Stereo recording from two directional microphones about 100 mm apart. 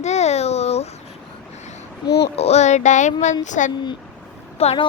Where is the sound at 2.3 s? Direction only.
90° left.